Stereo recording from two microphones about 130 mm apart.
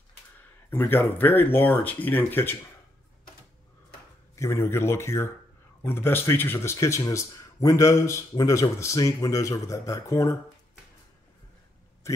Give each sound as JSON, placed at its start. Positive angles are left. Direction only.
{"t": 0.7, "sound": "speech", "side_deg": 15}
{"t": 4.4, "sound": "speech", "side_deg": 20}